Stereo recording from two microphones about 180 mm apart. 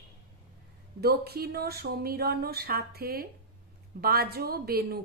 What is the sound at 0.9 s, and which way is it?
Speech, 60° right (ahead or behind).